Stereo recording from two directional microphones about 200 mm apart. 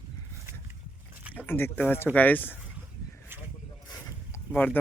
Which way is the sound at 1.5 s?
10° left (ahead or behind).